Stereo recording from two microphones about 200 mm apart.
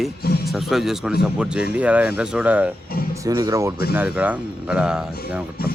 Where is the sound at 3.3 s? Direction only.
20° right (ahead or behind).